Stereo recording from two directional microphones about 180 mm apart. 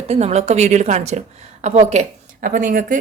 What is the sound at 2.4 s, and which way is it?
Speech, 50° right (ahead or behind).